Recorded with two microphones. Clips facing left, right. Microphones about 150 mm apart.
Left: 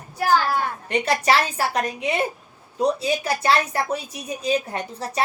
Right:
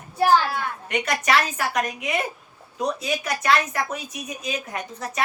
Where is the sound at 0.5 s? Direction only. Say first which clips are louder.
Left 3 dB; 30° left (ahead or behind).